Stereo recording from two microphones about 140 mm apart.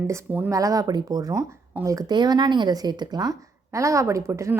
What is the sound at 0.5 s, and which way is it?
Speech, 25° right (ahead or behind).